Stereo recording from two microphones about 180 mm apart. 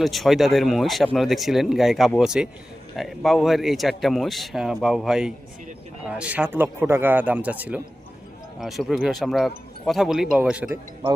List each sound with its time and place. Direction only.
0.0 s speech: centre (ahead or behind)